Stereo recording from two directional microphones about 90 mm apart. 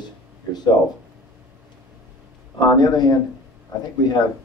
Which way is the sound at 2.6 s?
50° left (ahead or behind).